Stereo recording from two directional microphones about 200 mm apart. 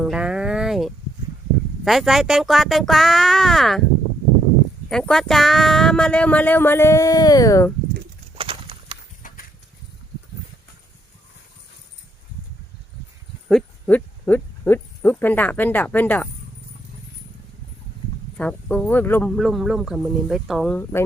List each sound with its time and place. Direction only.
0.0 s a sound: 5° right (ahead or behind)
1.8 s speech: centre (ahead or behind)
4.9 s speech: centre (ahead or behind)
8.4 s a sound: 25° right (ahead or behind)
9.2 s horse: 45° left (ahead or behind)
13.5 s speech: 5° left (ahead or behind)
18.3 s speech: 5° left (ahead or behind)
19.3 s speech: centre (ahead or behind)